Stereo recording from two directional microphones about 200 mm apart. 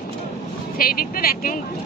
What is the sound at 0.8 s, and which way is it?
Speech, 45° left (ahead or behind).